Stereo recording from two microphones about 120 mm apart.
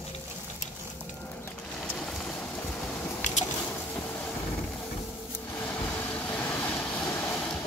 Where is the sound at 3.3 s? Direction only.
90° left.